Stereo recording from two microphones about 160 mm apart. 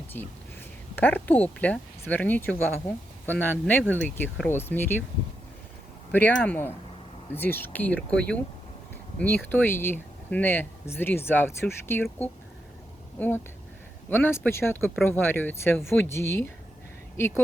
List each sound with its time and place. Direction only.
0.1 s speech: 10° left (ahead or behind)
6.1 s speech: 10° left (ahead or behind)
13.1 s speech: 10° left (ahead or behind)